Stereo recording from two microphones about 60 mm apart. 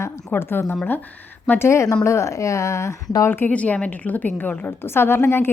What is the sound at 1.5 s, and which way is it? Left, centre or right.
A woman's voice, left.